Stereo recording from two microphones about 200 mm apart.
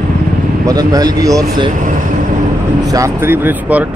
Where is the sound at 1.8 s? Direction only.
40° right (ahead or behind).